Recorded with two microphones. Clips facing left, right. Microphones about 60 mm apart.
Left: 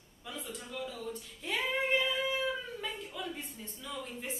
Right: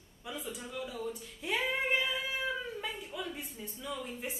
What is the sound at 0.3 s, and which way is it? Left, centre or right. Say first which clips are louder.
A woman's voice: right 1 dB; centre.